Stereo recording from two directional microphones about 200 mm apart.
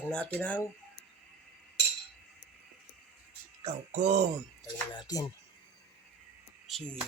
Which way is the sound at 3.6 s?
35° right (ahead or behind).